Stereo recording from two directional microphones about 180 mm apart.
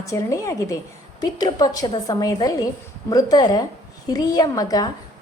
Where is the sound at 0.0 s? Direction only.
15° left (ahead or behind).